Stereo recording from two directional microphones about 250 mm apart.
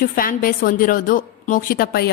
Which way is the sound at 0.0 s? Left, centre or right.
Left.